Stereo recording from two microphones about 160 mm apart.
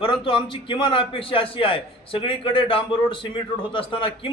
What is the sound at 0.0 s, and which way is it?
A man's voice, 35° left (ahead or behind).